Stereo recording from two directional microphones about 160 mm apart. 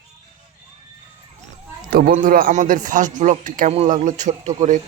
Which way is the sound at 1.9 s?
65° right (ahead or behind).